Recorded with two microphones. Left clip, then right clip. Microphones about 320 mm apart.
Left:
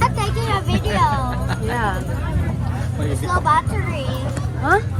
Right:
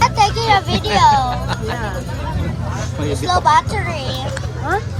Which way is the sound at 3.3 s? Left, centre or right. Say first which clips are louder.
Right 4 dB; centre.